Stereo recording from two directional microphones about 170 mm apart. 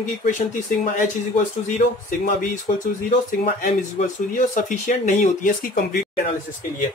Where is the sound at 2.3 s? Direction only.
50° left (ahead or behind).